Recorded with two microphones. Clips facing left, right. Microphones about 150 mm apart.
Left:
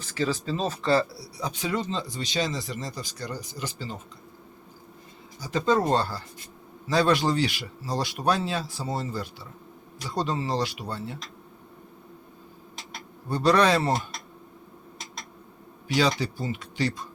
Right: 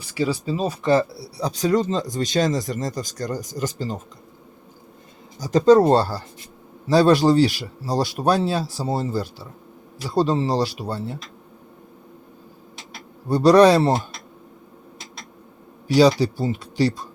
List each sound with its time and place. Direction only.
0.0 s speech: 15° right (ahead or behind); by 3.9 s 45° right (ahead or behind)
5.4 s speech: 40° right (ahead or behind)
13.2 s speech: 35° right (ahead or behind)
15.9 s speech: 35° right (ahead or behind)